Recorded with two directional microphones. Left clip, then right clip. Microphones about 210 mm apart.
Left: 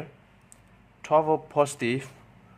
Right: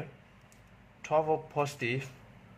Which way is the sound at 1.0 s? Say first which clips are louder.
Left 6 dB; 20° left (ahead or behind).